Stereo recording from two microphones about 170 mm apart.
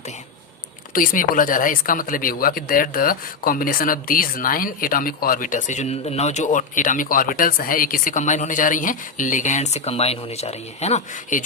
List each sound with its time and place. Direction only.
0.9 s speech: 55° left (ahead or behind)